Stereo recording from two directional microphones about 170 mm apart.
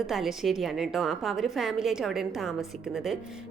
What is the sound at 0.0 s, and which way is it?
A woman's voice, centre (ahead or behind).